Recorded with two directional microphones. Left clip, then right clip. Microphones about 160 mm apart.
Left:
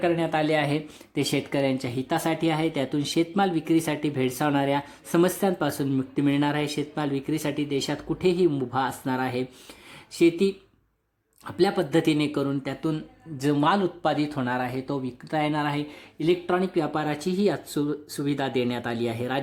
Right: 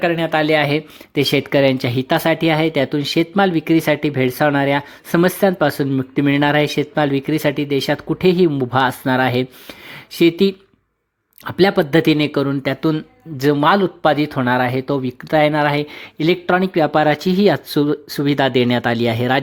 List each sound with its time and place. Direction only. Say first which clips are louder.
0.0 s speech: right 7 dB; 25° right (ahead or behind)